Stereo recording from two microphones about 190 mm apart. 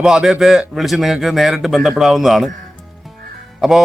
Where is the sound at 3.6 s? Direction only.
Centre (ahead or behind).